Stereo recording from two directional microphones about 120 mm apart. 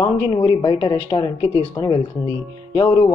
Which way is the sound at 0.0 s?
40° left (ahead or behind).